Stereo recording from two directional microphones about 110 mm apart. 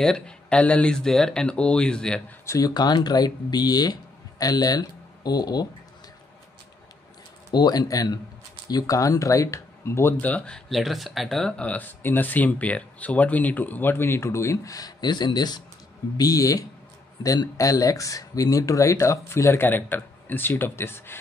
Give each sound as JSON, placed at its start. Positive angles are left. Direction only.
{"t": 0.0, "sound": "speech", "side_deg": 10}
{"t": 2.4, "sound": "speech", "side_deg": 30}
{"t": 7.5, "sound": "speech", "side_deg": 40}